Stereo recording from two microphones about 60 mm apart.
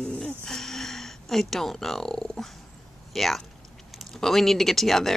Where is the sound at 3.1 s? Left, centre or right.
Centre.